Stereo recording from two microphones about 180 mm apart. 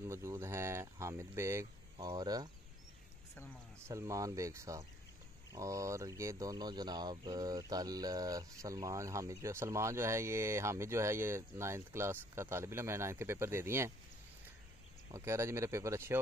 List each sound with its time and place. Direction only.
0.0 s speech: 15° right (ahead or behind)
3.8 s speech: 15° right (ahead or behind)
15.0 s speech: 15° right (ahead or behind)